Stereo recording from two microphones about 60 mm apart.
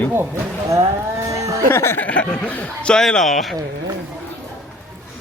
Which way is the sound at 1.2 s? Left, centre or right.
Right.